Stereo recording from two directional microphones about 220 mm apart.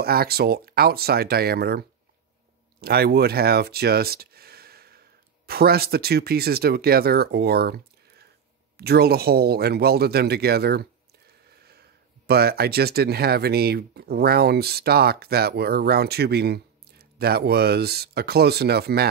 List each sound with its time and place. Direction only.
0.0 s speech: 45° right (ahead or behind)